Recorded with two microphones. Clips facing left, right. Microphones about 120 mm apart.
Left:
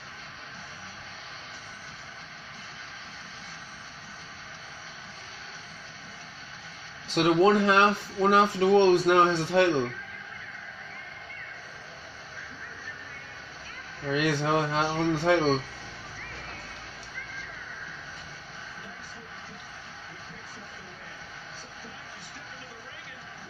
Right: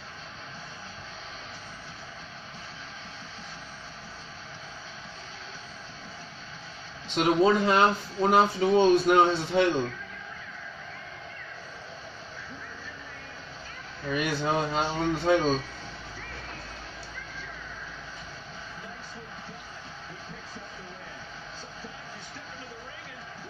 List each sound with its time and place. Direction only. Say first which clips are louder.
7.2 s speech: left 1 dB; 90° left
14.1 s speech: left 2 dB; 85° left